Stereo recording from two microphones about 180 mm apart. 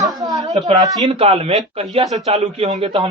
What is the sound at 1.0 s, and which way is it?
Speech, 35° right (ahead or behind).